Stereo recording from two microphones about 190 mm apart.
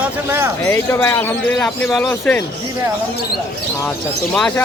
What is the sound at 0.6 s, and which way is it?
A man's voice, 15° left (ahead or behind).